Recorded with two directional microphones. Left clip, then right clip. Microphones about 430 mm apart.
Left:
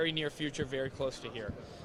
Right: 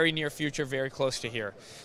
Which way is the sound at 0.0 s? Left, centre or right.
Right.